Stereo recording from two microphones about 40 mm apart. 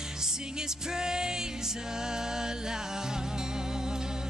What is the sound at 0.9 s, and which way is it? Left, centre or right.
Music, centre.